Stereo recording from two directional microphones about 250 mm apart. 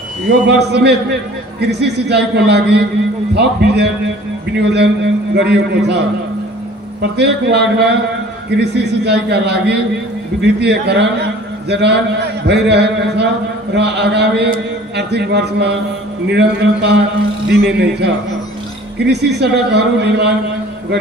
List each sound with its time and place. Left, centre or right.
0.5 s a man's voice: right